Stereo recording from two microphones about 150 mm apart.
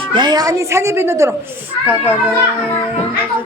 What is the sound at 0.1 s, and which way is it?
A woman's voice, 30° right (ahead or behind).